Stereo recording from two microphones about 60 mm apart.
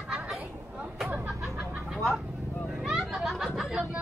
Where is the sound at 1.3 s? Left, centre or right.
Centre.